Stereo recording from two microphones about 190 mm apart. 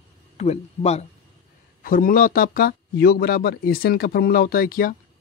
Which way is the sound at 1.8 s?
50° left (ahead or behind).